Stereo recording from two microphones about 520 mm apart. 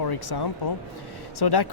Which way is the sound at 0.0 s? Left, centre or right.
Left.